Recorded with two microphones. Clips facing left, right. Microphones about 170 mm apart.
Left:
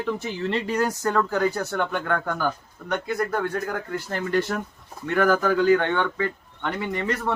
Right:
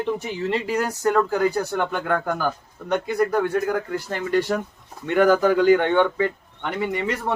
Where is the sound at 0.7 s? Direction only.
10° right (ahead or behind).